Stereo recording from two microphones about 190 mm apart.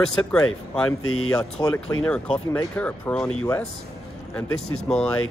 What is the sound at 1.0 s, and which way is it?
Speech, 90° left.